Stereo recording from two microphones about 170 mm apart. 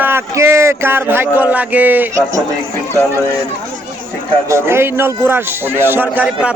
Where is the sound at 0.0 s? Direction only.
15° right (ahead or behind).